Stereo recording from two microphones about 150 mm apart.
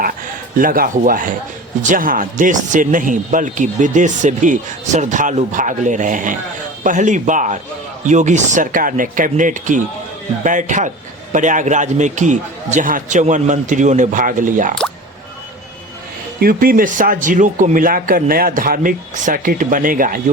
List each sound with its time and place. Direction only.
0.5 s a man's voice: 70° right (ahead or behind)
16.4 s a man's voice: 75° right (ahead or behind)